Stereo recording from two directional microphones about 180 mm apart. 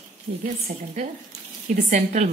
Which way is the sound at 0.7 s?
65° right (ahead or behind).